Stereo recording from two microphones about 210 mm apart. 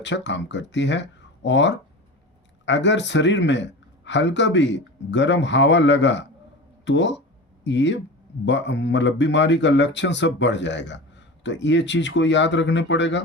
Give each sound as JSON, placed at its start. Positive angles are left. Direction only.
{"t": 0.0, "sound": "speech", "side_deg": 60}